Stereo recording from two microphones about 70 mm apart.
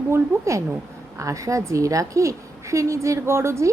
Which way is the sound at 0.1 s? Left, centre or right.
Right.